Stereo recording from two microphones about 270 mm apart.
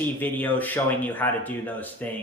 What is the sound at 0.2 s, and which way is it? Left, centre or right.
Speech, centre.